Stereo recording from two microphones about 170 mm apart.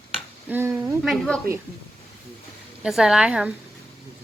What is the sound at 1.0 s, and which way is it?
Speech, centre (ahead or behind).